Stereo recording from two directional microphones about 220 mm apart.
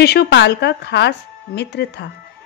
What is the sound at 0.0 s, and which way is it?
A woman's voice, 50° left (ahead or behind).